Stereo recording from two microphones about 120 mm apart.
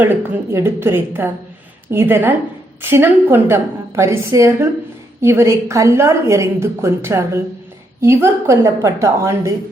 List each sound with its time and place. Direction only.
0.0 s a woman's voice: 15° right (ahead or behind)